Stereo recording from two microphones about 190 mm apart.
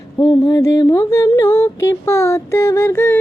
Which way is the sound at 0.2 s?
25° left (ahead or behind).